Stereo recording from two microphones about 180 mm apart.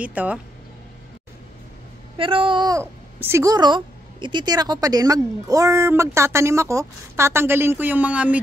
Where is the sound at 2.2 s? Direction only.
30° right (ahead or behind).